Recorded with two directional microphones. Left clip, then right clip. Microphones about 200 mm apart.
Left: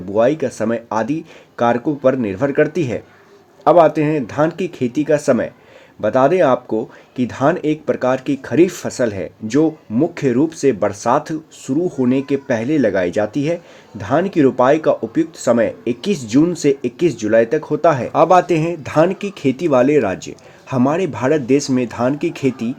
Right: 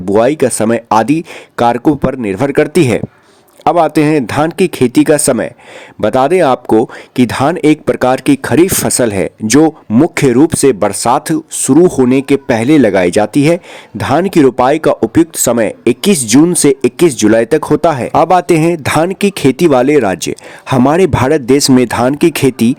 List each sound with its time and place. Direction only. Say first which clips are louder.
0.1 s speech: right 6 dB; 40° right (ahead or behind)